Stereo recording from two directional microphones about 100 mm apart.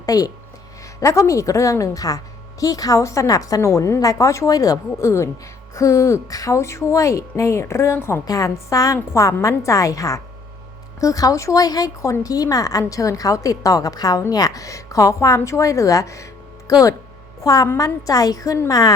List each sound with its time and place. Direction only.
0.0 s a woman's voice: 40° left (ahead or behind)